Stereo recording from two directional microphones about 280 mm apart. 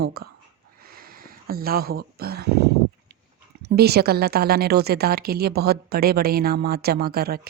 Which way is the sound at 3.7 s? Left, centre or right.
Right.